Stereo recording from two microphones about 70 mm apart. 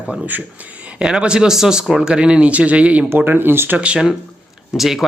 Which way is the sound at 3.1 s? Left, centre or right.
Right.